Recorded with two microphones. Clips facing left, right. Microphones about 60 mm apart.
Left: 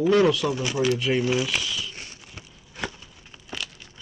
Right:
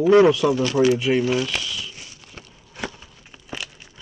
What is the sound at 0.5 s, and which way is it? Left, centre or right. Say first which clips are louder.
Speech: right 6 dB; centre.